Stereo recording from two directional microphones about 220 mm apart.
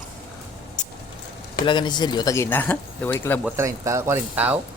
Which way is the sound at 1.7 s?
20° left (ahead or behind).